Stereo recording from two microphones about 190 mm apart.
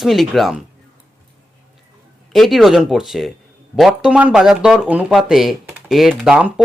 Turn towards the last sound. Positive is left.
turn(degrees=-5)  # may be behind; listen again after turning